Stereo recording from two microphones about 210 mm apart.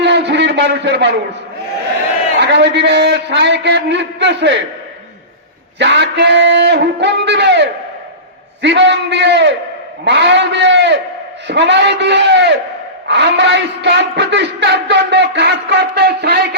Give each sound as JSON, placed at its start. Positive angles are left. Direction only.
{"t": 0.0, "sound": "a sound", "side_deg": -55}
{"t": 2.4, "sound": "speech", "side_deg": -55}
{"t": 5.8, "sound": "speech", "side_deg": -55}